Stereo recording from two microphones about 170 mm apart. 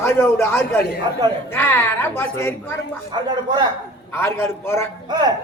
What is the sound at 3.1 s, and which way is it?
Speech, 25° right (ahead or behind).